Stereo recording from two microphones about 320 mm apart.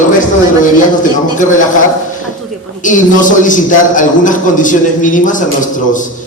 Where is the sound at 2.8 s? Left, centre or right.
Left.